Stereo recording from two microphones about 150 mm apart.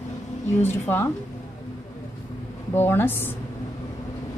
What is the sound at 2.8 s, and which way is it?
Speech, 15° left (ahead or behind).